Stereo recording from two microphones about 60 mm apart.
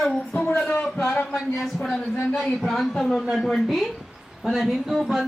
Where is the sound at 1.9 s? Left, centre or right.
Left.